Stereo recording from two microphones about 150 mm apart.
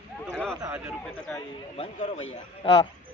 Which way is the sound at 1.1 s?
10° left (ahead or behind).